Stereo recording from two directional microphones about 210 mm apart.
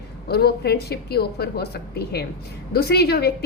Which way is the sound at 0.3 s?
50° left (ahead or behind).